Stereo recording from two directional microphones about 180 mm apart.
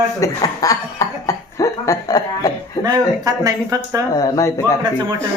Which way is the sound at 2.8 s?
20° right (ahead or behind).